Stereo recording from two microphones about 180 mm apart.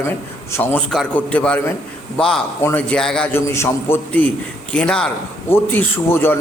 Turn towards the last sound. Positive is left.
turn(degrees=15)  # may be behind; listen again after turning